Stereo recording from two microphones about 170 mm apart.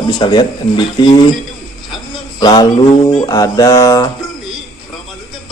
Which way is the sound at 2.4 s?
25° left (ahead or behind).